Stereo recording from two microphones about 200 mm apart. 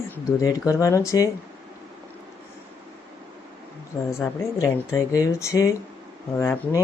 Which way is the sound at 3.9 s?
10° left (ahead or behind).